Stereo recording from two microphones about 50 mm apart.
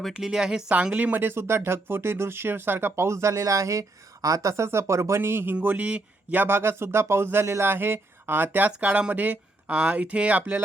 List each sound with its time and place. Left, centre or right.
0.1 s speech: centre
0.9 s speech: right
5.6 s speech: right
6.4 s speech: right